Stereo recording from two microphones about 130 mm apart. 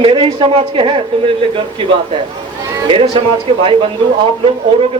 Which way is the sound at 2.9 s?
45° right (ahead or behind).